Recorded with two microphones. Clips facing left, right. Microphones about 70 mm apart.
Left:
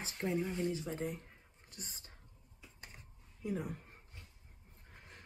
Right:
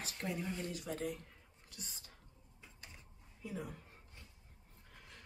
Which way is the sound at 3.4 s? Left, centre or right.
Left.